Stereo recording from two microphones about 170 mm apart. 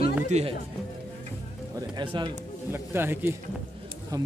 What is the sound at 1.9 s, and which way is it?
Speech, 30° right (ahead or behind).